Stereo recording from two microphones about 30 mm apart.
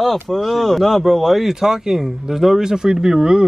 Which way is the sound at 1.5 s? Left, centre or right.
Centre.